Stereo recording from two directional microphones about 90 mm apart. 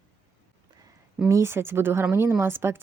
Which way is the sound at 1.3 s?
30° right (ahead or behind).